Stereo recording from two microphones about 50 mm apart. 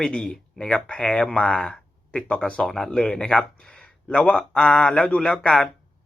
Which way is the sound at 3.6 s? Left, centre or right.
Centre.